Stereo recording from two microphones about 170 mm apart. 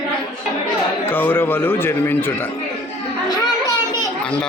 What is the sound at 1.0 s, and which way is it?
A man's voice, 10° left (ahead or behind).